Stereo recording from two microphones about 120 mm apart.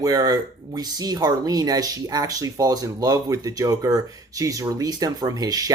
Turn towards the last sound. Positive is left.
turn(degrees=-30)  # may be behind; listen again after turning